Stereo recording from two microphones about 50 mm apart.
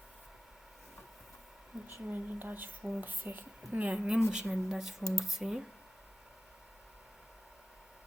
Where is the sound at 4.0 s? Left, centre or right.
Centre.